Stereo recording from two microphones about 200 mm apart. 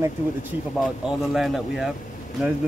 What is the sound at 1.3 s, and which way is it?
Speech, centre (ahead or behind).